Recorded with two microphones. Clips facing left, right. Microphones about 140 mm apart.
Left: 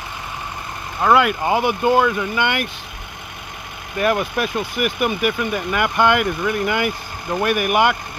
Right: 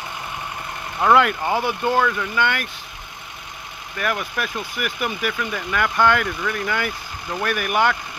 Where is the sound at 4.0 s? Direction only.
25° left (ahead or behind).